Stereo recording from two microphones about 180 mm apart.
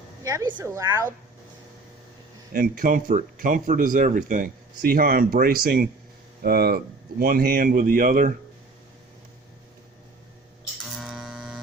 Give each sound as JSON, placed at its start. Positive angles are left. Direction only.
{"t": 0.2, "sound": "a woman's voice", "side_deg": -20}
{"t": 2.5, "sound": "speech", "side_deg": -50}
{"t": 10.8, "sound": "a sound", "side_deg": 0}